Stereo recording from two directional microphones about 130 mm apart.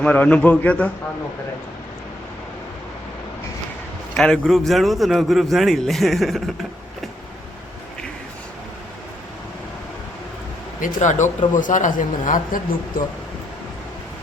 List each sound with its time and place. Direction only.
0.0 s a man's voice: 10° left (ahead or behind)
4.2 s a man's voice: 5° left (ahead or behind)
10.8 s a man's voice: 80° left